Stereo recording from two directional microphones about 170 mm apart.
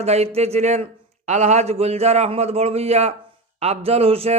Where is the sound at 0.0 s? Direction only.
40° right (ahead or behind).